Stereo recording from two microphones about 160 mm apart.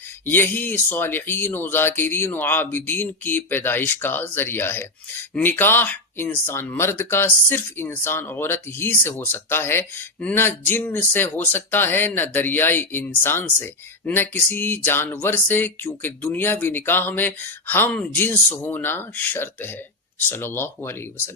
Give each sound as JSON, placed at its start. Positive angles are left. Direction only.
{"t": 0.3, "sound": "speech", "side_deg": 10}